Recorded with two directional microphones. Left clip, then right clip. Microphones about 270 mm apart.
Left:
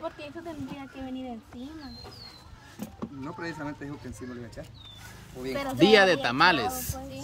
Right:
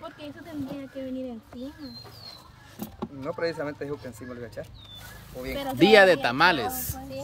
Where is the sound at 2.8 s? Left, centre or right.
Centre.